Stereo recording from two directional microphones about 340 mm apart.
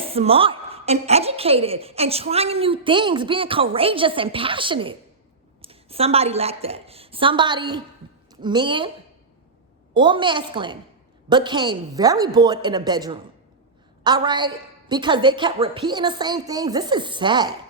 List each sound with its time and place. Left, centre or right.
0.0 s a woman's voice: centre
9.9 s a woman's voice: centre